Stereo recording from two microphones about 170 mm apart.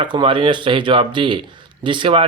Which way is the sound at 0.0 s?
30° right (ahead or behind).